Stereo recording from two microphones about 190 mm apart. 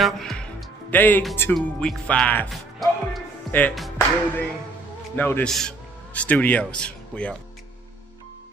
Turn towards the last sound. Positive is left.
turn(degrees=5)  # may be behind; listen again after turning